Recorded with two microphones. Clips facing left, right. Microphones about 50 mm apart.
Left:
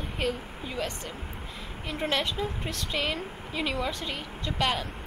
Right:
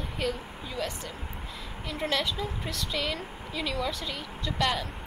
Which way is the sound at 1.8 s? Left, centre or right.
Centre.